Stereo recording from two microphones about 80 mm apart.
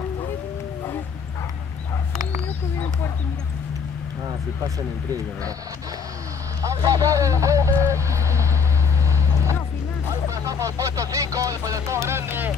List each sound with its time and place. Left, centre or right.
6.6 s speech: right
7.9 s vehicle: right
10.3 s a sound: right